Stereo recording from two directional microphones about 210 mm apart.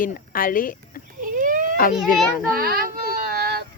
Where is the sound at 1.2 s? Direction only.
40° right (ahead or behind).